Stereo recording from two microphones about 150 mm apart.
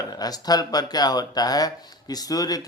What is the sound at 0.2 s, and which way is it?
Speech, 25° left (ahead or behind).